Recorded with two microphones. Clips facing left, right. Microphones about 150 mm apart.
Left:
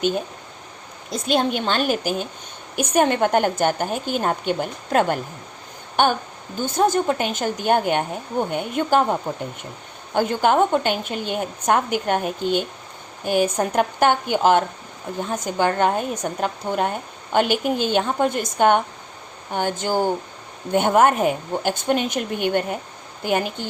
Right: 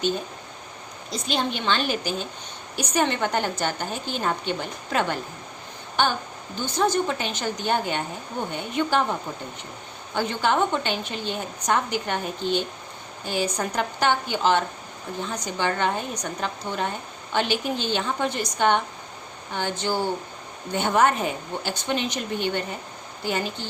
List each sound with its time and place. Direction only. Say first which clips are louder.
1.1 s a woman's voice: left 6 dB; 50° left (ahead or behind)
10.2 s a woman's voice: left 5 dB; 50° left (ahead or behind)